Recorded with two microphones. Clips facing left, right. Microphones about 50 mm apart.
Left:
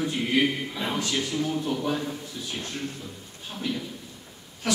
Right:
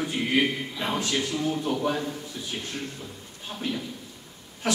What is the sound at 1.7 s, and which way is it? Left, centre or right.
Speech, centre.